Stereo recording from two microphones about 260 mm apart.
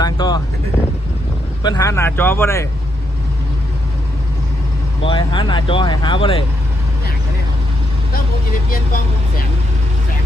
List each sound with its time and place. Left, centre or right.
0.0 s vehicle: centre
1.6 s speech: centre
5.0 s speech: centre